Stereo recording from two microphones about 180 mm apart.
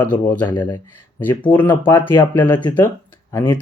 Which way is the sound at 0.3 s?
10° left (ahead or behind).